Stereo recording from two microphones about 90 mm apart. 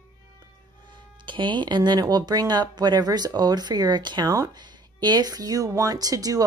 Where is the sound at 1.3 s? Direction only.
60° right (ahead or behind).